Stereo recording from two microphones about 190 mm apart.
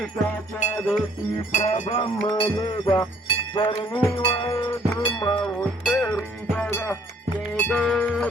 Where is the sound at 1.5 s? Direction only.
40° left (ahead or behind).